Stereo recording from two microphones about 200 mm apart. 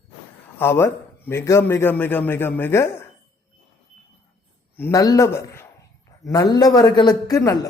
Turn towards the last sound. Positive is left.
turn(degrees=15)  # may be behind; listen again after turning